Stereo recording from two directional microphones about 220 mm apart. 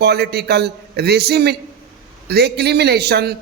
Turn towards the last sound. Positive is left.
turn(degrees=-50)  # may be behind; listen again after turning